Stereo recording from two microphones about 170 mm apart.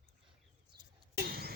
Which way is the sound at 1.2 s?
60° right (ahead or behind).